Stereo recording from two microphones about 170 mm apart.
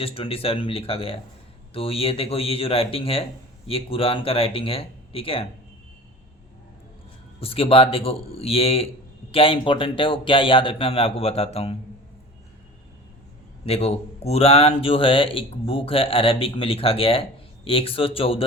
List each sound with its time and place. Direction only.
0.0 s speech: 35° left (ahead or behind)
7.3 s speech: 35° left (ahead or behind)
13.7 s speech: 35° left (ahead or behind)